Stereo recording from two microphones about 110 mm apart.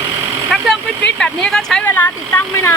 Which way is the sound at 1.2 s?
5° left (ahead or behind).